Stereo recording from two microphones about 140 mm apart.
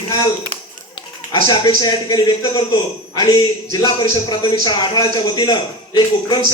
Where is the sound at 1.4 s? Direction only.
30° left (ahead or behind).